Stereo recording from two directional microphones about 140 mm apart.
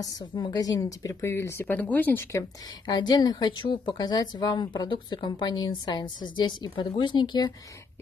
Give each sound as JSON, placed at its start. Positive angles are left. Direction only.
{"t": 0.0, "sound": "a woman's voice", "side_deg": 30}
{"t": 2.9, "sound": "a woman's voice", "side_deg": 30}